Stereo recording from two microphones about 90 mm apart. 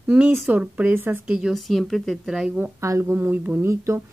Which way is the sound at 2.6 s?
30° right (ahead or behind).